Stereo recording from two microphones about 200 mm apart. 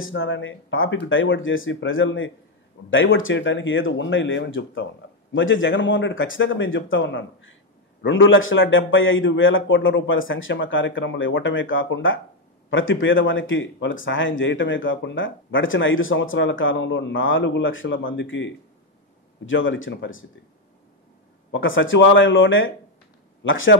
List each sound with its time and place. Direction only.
0.0 s speech: 80° left
21.5 s speech: 70° left (ahead or behind)